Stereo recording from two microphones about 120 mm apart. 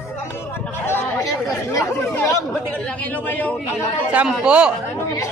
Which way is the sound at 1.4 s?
30° left (ahead or behind).